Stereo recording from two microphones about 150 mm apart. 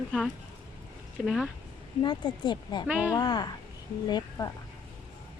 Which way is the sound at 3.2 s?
30° left (ahead or behind).